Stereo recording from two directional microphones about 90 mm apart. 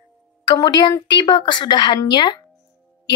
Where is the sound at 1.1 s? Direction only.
60° left (ahead or behind).